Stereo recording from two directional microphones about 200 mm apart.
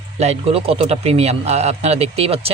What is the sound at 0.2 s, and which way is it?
Speech, 30° right (ahead or behind).